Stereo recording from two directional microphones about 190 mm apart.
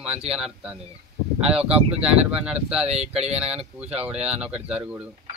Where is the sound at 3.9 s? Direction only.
5° right (ahead or behind).